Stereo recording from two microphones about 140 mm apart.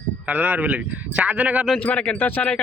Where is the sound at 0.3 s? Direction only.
10° right (ahead or behind).